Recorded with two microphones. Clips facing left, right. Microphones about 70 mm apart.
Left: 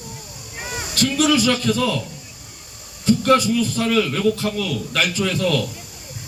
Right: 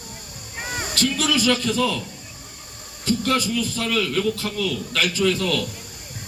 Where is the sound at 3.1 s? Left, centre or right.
Centre.